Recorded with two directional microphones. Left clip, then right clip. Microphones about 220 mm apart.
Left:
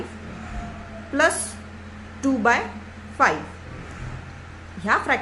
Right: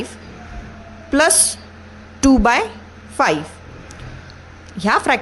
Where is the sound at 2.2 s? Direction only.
45° right (ahead or behind).